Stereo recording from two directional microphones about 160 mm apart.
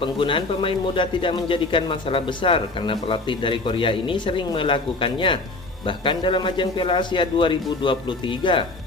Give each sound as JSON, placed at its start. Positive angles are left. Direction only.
{"t": 0.0, "sound": "speech", "side_deg": 30}